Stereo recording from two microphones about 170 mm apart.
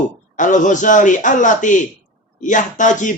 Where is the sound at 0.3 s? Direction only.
50° left (ahead or behind).